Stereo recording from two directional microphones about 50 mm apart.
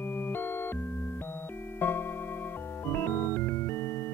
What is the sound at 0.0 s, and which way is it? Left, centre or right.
Music, left.